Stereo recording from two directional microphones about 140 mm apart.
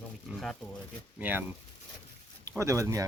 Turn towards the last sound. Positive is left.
turn(degrees=-20)  # may be behind; listen again after turning